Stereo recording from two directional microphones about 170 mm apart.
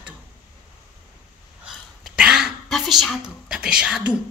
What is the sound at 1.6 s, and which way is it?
Throat clearing, 5° right (ahead or behind).